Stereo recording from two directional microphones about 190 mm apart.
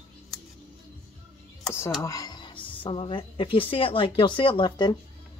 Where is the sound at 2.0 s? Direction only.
20° left (ahead or behind).